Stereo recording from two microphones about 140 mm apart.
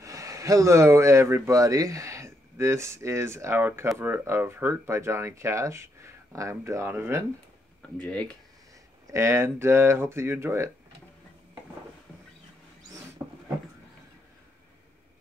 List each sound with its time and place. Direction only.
0.0 s speech: 25° right (ahead or behind)
8.0 s speech: 10° left (ahead or behind)
9.0 s speech: 20° right (ahead or behind)